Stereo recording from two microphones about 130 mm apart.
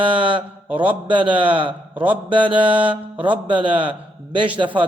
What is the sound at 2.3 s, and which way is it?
A man's voice, 40° right (ahead or behind).